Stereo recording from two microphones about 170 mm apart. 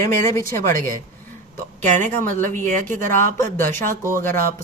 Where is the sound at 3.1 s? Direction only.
15° left (ahead or behind).